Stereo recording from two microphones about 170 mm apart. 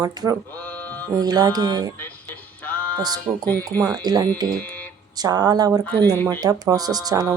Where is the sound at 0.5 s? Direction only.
10° left (ahead or behind).